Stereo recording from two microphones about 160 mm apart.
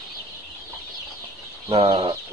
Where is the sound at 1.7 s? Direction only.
35° right (ahead or behind).